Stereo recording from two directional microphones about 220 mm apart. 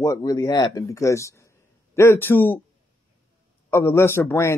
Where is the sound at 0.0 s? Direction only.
15° left (ahead or behind).